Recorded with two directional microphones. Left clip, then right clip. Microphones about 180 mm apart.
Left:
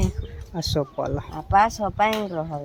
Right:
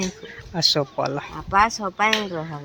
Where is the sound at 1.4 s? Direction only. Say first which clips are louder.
Even; 60° left (ahead or behind).